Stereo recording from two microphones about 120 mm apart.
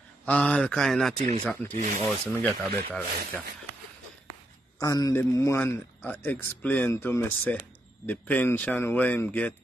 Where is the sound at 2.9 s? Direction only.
15° left (ahead or behind).